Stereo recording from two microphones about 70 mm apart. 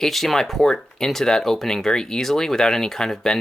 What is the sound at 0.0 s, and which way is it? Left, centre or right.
Speech, centre.